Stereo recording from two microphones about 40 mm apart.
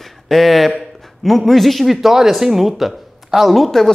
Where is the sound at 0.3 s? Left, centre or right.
Centre.